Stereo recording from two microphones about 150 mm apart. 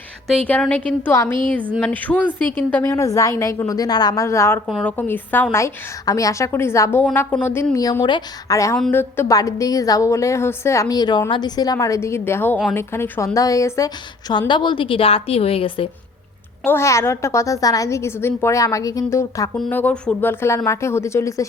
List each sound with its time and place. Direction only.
0.4 s a woman's voice: 10° left (ahead or behind)
4.6 s a woman's voice: 5° left (ahead or behind); by 15.9 s 35° left (ahead or behind)
16.6 s a woman's voice: 20° left (ahead or behind)
19.7 s a woman's voice: 10° left (ahead or behind)